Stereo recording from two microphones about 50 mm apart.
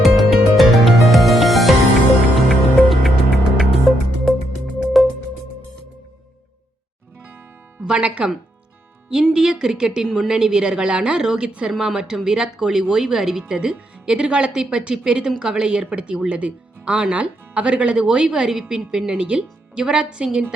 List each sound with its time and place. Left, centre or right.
0.0 s music: centre
7.9 s music: centre
9.0 s speech: centre
11.7 s speech: centre